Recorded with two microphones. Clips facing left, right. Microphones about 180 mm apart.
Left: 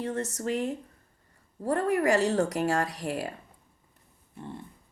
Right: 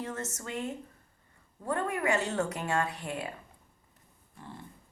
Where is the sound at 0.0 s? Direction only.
35° left (ahead or behind).